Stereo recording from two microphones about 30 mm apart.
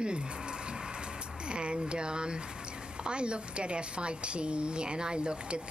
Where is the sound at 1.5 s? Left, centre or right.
Right.